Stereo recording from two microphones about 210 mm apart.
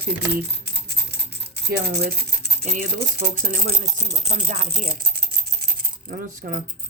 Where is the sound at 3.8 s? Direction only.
25° right (ahead or behind).